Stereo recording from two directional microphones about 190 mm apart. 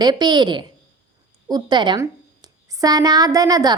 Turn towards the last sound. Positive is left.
turn(degrees=-20)  # may be behind; listen again after turning